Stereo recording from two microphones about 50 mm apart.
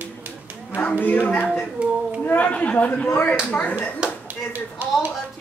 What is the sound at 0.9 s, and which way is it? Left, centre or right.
Speech, left.